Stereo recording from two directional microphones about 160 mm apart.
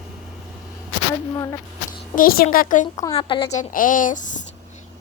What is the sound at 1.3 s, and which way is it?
Speech, 20° left (ahead or behind).